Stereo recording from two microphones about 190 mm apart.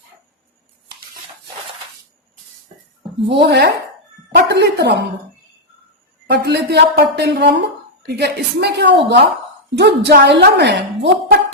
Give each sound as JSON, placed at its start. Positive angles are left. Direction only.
{"t": 3.3, "sound": "a woman's voice", "side_deg": -60}
{"t": 6.3, "sound": "a woman's voice", "side_deg": -60}